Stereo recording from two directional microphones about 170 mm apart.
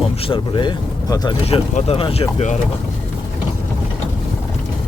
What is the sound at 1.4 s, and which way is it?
Speech, 35° left (ahead or behind).